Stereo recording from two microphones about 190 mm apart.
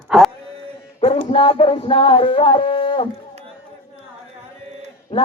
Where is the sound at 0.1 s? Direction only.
Centre (ahead or behind).